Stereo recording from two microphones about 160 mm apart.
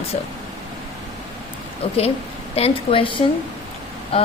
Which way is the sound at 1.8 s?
35° left (ahead or behind).